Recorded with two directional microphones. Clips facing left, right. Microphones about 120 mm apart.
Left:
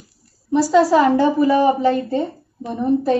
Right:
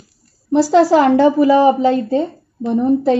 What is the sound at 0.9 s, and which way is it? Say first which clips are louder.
A woman's voice: right 3 dB; 80° right.